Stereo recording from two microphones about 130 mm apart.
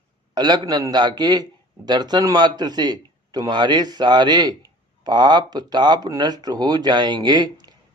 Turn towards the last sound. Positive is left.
turn(degrees=-35)  # may be behind; listen again after turning